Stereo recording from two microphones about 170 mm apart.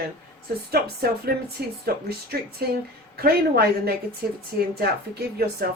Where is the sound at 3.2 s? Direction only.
65° right (ahead or behind).